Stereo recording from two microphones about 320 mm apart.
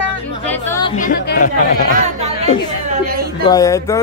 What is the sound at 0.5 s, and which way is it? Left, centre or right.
Chatter, centre.